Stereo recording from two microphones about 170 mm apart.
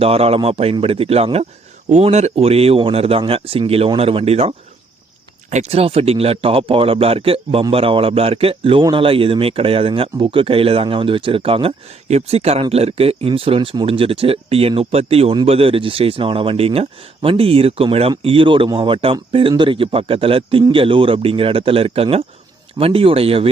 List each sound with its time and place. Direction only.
0.0 s a man's voice: 35° right (ahead or behind)